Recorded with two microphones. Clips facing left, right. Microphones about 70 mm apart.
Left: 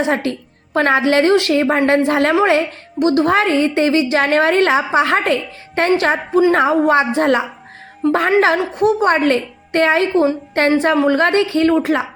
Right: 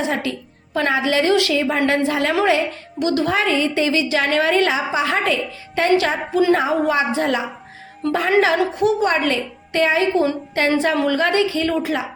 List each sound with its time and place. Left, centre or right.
0.1 s a woman's voice: left